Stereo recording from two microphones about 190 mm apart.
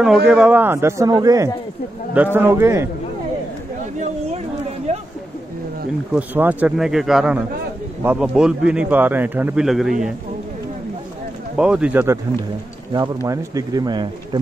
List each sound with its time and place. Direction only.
0.0 s a man's voice: 5° right (ahead or behind)
6.1 s a man's voice: 10° right (ahead or behind)
11.5 s a man's voice: 5° right (ahead or behind); by 14.4 s 25° right (ahead or behind)